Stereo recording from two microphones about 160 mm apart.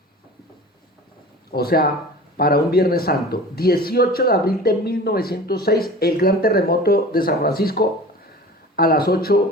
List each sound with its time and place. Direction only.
1.5 s speech: 70° left (ahead or behind)